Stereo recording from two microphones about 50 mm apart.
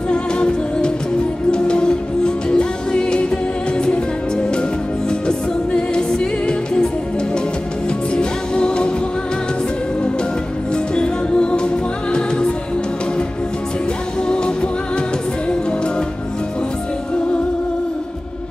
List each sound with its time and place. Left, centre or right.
0.1 s music: centre
5.7 s music: centre
8.1 s music: centre
10.7 s music: centre
14.3 s music: centre